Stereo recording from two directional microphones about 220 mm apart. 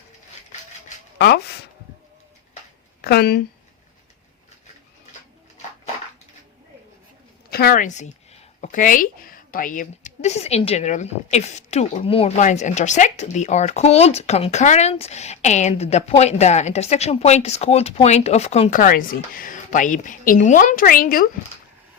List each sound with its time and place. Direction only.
3.0 s speech: 45° left (ahead or behind)
7.5 s a woman's voice: 45° left (ahead or behind)